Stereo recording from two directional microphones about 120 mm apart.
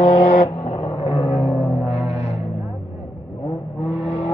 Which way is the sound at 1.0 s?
60° left (ahead or behind).